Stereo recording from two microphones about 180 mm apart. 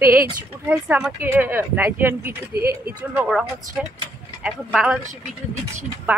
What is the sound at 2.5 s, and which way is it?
Speech, 60° right (ahead or behind).